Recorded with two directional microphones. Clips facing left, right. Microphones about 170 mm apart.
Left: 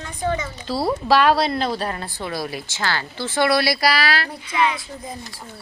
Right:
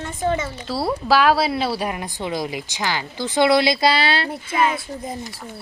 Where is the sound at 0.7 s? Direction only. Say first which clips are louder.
Left 1 dB; centre (ahead or behind); by 4.3 s 25° right (ahead or behind).